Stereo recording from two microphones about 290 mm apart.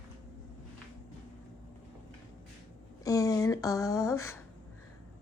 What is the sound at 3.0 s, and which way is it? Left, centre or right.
Speech, centre.